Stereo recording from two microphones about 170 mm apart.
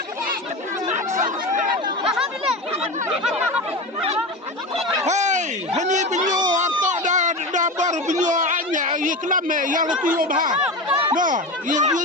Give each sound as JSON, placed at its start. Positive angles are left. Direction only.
{"t": 1.1, "sound": "chatter", "side_deg": -50}
{"t": 5.0, "sound": "a sound", "side_deg": -45}
{"t": 9.0, "sound": "speech", "side_deg": -50}
{"t": 10.6, "sound": "chatter", "side_deg": -5}
{"t": 11.1, "sound": "speech", "side_deg": -50}